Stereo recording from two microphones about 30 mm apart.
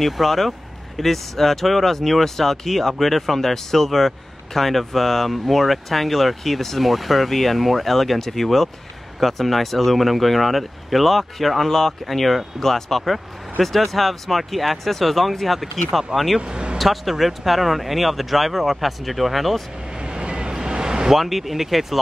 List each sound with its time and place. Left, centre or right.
0.0 s speech: centre
16.3 s speech: right
16.7 s speech: centre
20.0 s vehicle: right
21.2 s speech: centre